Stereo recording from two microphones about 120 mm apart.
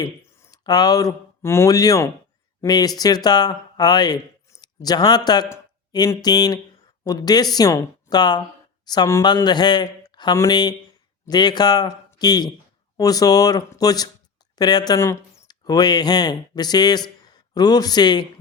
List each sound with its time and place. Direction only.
0.0 s a man's voice: 30° left (ahead or behind)